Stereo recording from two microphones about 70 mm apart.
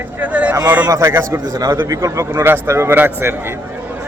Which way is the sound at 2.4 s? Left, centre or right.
Right.